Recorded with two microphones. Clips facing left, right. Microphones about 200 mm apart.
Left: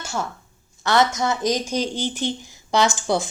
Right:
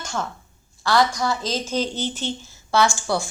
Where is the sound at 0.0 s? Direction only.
10° left (ahead or behind).